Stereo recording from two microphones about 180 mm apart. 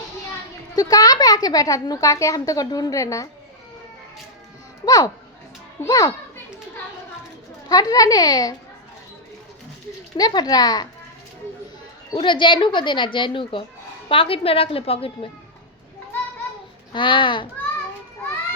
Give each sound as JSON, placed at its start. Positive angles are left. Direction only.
{"t": 0.8, "sound": "a woman's voice", "side_deg": 20}
{"t": 4.9, "sound": "a woman's voice", "side_deg": 20}
{"t": 7.7, "sound": "a woman's voice", "side_deg": 20}
{"t": 10.2, "sound": "a woman's voice", "side_deg": 20}
{"t": 12.1, "sound": "a woman's voice", "side_deg": 25}
{"t": 16.9, "sound": "a woman's voice", "side_deg": 25}